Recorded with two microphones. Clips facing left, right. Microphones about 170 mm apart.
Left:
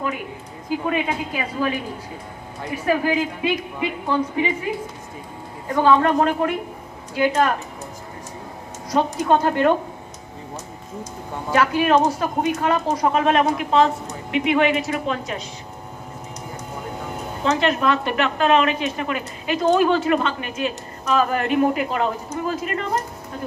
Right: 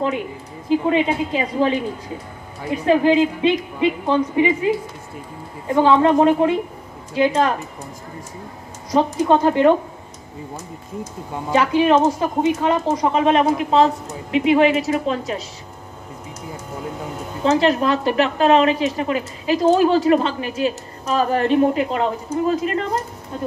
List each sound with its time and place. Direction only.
0.7 s speech: 25° right (ahead or behind)
5.7 s speech: 20° right (ahead or behind)
8.9 s speech: 20° right (ahead or behind)
11.5 s speech: 20° right (ahead or behind)
17.5 s speech: 30° right (ahead or behind)